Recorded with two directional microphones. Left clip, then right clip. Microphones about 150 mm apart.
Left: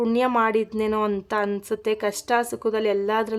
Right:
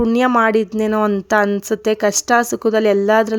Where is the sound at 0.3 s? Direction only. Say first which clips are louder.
Right 7 dB; 30° right (ahead or behind).